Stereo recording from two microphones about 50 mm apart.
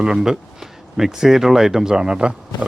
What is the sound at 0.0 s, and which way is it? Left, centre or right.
Speech, centre.